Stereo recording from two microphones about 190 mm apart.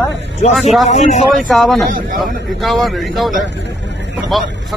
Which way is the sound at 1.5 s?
Centre (ahead or behind).